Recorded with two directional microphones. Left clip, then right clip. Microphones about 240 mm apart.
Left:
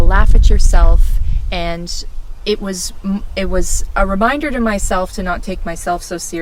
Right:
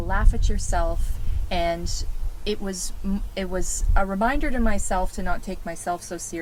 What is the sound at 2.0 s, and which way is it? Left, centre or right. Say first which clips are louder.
A woman's voice: left 9 dB; left.